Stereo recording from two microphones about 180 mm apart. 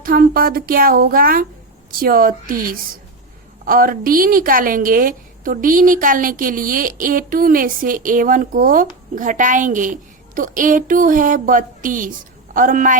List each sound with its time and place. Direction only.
0.0 s a woman's voice: 50° right (ahead or behind)